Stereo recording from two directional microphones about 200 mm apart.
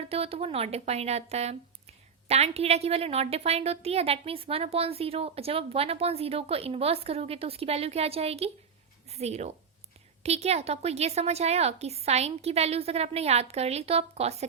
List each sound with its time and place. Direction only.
0.1 s a woman's voice: 30° right (ahead or behind)